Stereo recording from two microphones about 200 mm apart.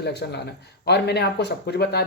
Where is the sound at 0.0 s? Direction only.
55° left (ahead or behind).